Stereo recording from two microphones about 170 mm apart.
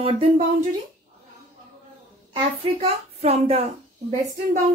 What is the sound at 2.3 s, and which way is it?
Speech, 35° right (ahead or behind).